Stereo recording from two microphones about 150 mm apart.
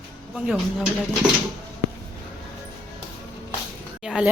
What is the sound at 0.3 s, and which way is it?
Speech, 5° right (ahead or behind).